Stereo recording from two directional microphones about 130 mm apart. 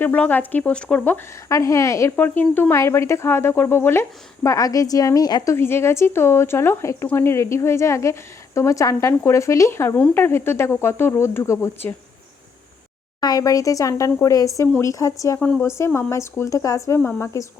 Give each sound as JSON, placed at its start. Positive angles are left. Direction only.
{"t": 0.0, "sound": "speech", "side_deg": 15}
{"t": 1.5, "sound": "speech", "side_deg": 25}
{"t": 13.1, "sound": "speech", "side_deg": 30}
{"t": 15.4, "sound": "speech", "side_deg": 10}
{"t": 15.6, "sound": "speech", "side_deg": 20}